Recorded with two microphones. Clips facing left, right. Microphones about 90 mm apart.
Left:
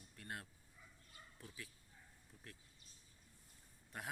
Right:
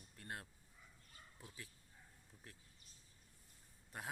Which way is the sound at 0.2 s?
25° right (ahead or behind).